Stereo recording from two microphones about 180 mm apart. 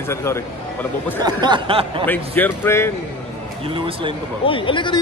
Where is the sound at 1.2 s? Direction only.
25° right (ahead or behind).